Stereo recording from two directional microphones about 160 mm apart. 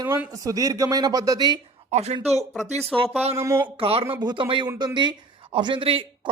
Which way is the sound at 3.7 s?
35° right (ahead or behind).